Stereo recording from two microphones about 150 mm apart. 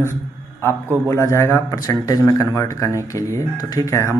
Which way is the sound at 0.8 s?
15° right (ahead or behind).